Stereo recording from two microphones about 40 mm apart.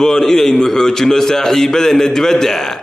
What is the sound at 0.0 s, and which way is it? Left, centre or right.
A man's voice, centre.